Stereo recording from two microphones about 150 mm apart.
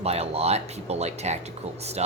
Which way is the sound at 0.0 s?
45° right (ahead or behind).